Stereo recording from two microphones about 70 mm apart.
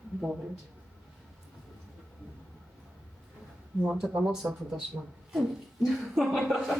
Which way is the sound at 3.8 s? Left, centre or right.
Centre.